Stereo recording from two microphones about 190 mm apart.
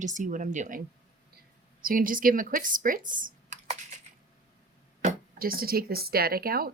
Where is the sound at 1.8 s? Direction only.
45° right (ahead or behind).